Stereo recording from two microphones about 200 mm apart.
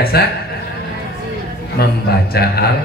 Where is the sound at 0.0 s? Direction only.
50° left (ahead or behind).